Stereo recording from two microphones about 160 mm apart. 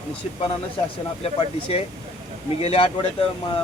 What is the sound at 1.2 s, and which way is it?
A man's voice, 35° left (ahead or behind).